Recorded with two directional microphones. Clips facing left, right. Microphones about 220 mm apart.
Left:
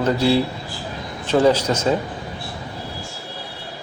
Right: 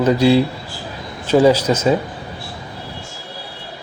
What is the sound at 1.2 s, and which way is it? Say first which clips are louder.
Speech: right 4 dB; 10° right (ahead or behind).